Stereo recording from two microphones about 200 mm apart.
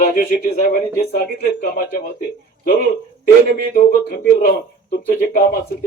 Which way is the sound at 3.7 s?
50° left (ahead or behind).